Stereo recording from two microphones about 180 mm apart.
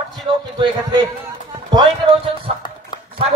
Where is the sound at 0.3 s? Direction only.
25° right (ahead or behind).